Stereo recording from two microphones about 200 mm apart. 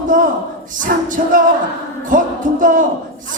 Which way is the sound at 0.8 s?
40° right (ahead or behind).